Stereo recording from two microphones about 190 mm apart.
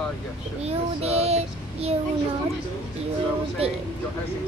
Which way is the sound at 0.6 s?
35° right (ahead or behind).